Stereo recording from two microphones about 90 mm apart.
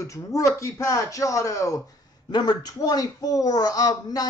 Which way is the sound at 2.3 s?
50° left (ahead or behind).